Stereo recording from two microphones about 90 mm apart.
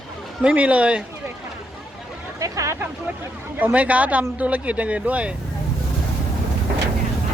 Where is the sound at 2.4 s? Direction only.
35° right (ahead or behind).